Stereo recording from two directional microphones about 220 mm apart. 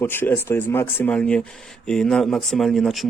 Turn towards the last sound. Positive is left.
turn(degrees=0)  # may be behind; listen again after turning